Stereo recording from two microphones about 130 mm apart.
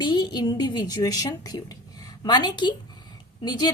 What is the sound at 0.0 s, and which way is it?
A woman's voice, 35° left (ahead or behind).